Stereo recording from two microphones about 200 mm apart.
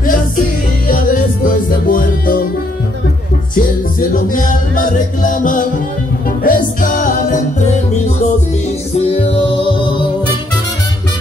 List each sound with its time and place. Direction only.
0.8 s music: 40° left (ahead or behind)
4.1 s music: 40° left (ahead or behind); by 10.0 s 25° left (ahead or behind)